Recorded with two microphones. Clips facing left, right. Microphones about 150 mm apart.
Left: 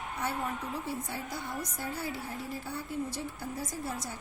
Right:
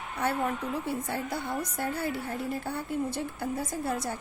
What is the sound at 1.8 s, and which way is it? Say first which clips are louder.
Speech: right 6 dB; 60° right (ahead or behind).